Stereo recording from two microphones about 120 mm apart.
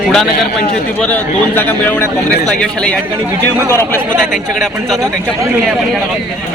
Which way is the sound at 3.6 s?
20° left (ahead or behind).